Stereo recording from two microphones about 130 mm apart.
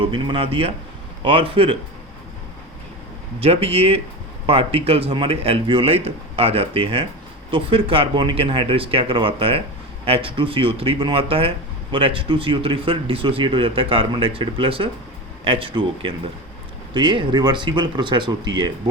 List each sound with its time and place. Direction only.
0.0 s speech: 40° right (ahead or behind)
3.4 s speech: 50° right (ahead or behind)